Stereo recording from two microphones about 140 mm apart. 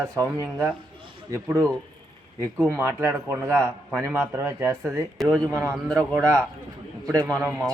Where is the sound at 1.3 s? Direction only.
20° right (ahead or behind).